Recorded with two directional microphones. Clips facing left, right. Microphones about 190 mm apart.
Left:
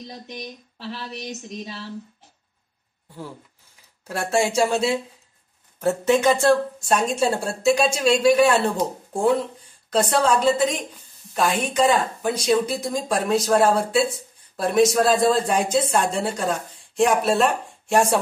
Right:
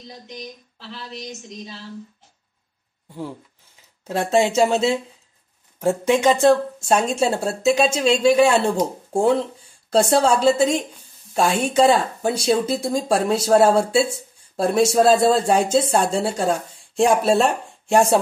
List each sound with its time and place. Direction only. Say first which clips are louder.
4.1 s speech: right 3 dB; 20° right (ahead or behind)
5.8 s speech: right 1 dB; 15° right (ahead or behind); by 17.5 s 30° right (ahead or behind)